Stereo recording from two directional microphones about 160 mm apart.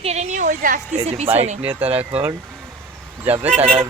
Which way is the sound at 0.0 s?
45° right (ahead or behind).